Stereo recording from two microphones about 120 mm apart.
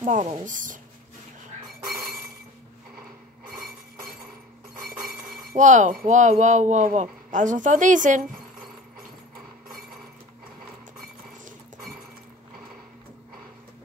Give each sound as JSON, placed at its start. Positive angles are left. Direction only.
{"t": 0.0, "sound": "speech", "side_deg": -80}
{"t": 5.6, "sound": "speech", "side_deg": -90}